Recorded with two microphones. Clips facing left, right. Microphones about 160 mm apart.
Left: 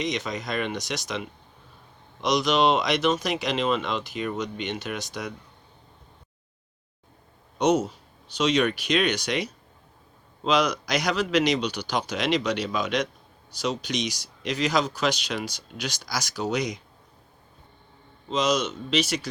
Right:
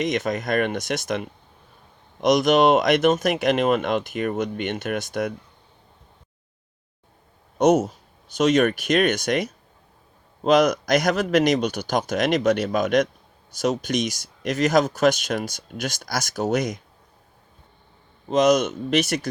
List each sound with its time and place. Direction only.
0.0 s speech: 50° right (ahead or behind)
7.6 s speech: 50° right (ahead or behind)
18.3 s speech: 55° right (ahead or behind)